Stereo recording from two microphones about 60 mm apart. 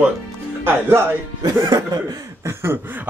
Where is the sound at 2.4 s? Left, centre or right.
Right.